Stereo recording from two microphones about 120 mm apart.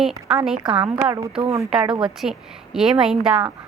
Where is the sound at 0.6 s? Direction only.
45° right (ahead or behind).